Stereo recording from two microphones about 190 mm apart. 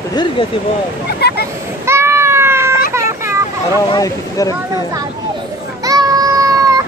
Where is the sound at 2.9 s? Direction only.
15° right (ahead or behind).